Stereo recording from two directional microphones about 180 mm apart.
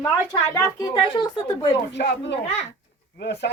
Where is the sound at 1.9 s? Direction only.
70° left (ahead or behind).